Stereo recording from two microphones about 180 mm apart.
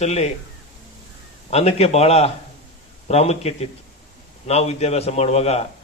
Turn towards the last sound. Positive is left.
turn(degrees=35)  # may be behind; listen again after turning